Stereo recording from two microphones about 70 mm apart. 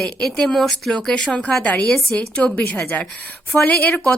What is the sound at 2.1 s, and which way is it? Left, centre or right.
A woman's voice, centre.